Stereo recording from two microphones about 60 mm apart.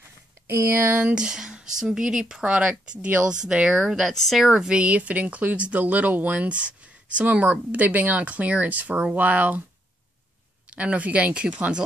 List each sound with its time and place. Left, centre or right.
0.5 s speech: right
1.0 s speech: centre
4.1 s speech: centre
4.5 s speech: centre
10.7 s speech: right